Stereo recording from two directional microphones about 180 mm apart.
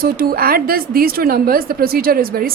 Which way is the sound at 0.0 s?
55° right (ahead or behind).